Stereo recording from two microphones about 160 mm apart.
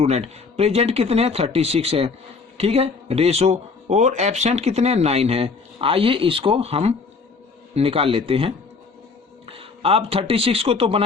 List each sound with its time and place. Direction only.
0.0 s speech: 40° right (ahead or behind)